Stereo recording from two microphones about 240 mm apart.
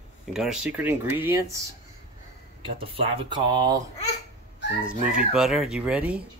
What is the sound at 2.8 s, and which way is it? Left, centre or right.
Speech, right.